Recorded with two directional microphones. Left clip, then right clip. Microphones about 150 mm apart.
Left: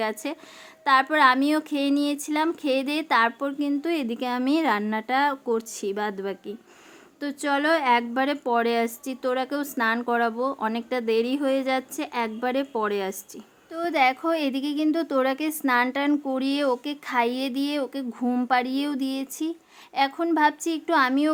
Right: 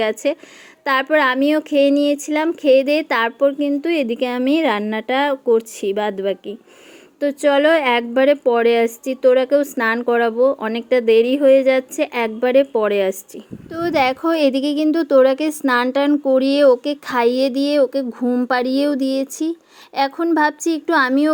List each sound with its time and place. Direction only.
0.0 s speech: 10° right (ahead or behind)
18.4 s speech: 25° right (ahead or behind)